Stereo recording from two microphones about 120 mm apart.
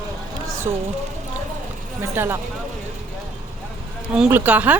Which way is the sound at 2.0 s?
20° right (ahead or behind).